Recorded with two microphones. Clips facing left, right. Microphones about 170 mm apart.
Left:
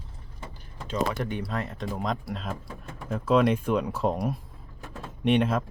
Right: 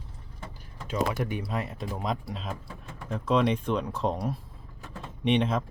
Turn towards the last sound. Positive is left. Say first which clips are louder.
# left 2 dB
turn(degrees=5)  # may be behind; listen again after turning